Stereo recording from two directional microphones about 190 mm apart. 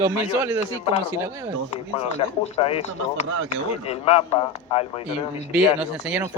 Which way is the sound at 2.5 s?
30° left (ahead or behind).